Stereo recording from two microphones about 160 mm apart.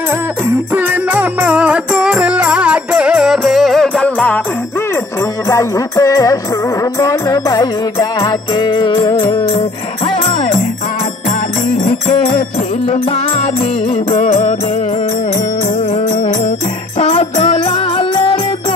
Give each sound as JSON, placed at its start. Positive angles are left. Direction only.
{"t": 0.7, "sound": "music", "side_deg": -10}
{"t": 5.5, "sound": "music", "side_deg": 20}
{"t": 14.1, "sound": "music", "side_deg": 45}
{"t": 17.1, "sound": "music", "side_deg": 40}